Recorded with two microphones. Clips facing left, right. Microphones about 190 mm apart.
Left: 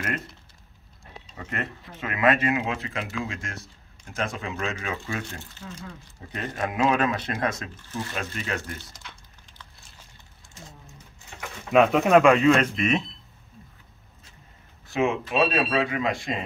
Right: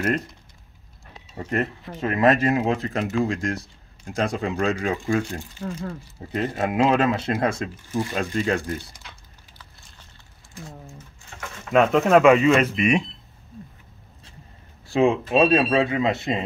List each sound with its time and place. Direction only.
1.5 s speech: 35° right (ahead or behind)
5.3 s speech: 10° right (ahead or behind)
5.6 s speech: 50° right (ahead or behind)
6.3 s speech: 25° right (ahead or behind)
7.7 s speech: 10° right (ahead or behind)
8.1 s speech: 30° right (ahead or behind)
11.7 s speech: 5° left (ahead or behind)
14.9 s speech: 30° right (ahead or behind)